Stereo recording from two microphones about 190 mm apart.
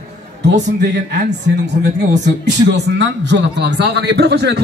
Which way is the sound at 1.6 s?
65° right (ahead or behind).